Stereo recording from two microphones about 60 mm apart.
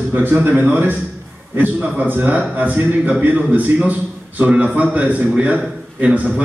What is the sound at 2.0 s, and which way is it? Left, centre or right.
A man's voice, right.